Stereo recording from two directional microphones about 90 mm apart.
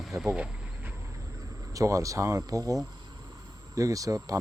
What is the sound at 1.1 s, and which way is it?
Speech, 35° right (ahead or behind).